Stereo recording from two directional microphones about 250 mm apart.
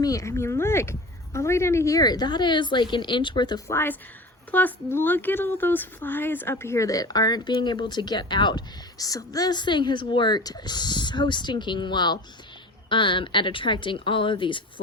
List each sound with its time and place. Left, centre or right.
0.0 s a woman's voice: centre